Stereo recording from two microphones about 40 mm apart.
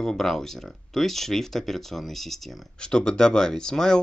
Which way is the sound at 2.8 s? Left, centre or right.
Left.